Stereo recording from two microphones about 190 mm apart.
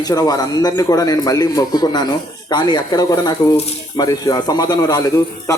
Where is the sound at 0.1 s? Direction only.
20° left (ahead or behind).